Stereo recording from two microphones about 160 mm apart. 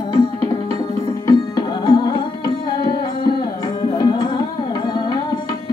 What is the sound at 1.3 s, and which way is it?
Music, 25° left (ahead or behind).